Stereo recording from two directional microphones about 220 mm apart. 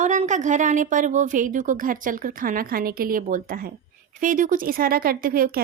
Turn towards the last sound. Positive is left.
turn(degrees=-40)  # may be behind; listen again after turning